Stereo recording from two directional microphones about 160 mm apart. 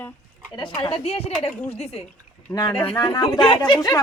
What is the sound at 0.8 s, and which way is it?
Speech, 35° left (ahead or behind).